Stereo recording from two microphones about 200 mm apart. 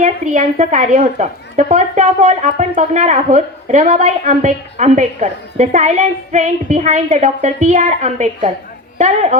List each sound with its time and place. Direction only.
0.0 s a woman's voice: 35° right (ahead or behind)